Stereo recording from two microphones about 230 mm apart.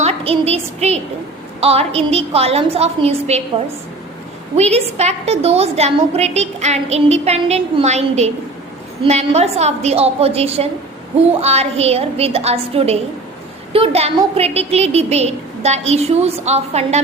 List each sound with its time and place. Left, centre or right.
0.0 s a woman's voice: right
4.5 s a woman's voice: right